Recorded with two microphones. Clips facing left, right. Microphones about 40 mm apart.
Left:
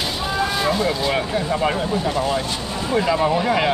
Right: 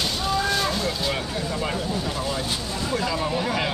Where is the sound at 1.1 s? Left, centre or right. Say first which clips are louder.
Left 7 dB; left.